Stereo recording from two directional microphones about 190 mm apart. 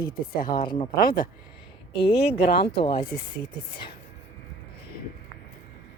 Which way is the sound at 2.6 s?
25° left (ahead or behind).